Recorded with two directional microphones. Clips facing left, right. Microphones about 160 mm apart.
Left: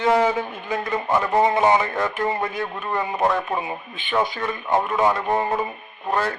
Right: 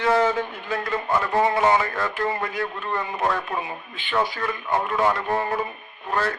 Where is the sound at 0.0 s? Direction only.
15° left (ahead or behind).